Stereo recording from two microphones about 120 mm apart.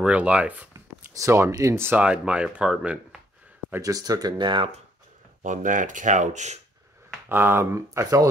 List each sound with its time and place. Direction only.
0.0 s speech: 10° right (ahead or behind)
1.1 s speech: 25° right (ahead or behind); by 3.2 s 5° right (ahead or behind)
3.8 s speech: 30° right (ahead or behind)
5.4 s speech: 90° right
7.2 s speech: 20° right (ahead or behind)